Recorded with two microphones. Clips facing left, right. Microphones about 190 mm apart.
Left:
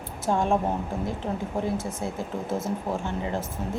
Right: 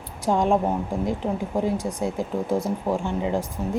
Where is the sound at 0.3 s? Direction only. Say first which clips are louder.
Right 3 dB; 15° right (ahead or behind).